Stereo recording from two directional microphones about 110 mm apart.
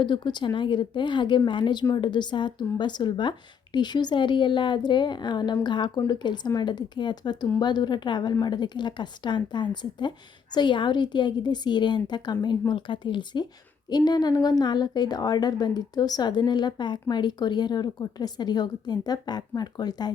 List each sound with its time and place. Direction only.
0.0 s a woman's voice: 45° left (ahead or behind)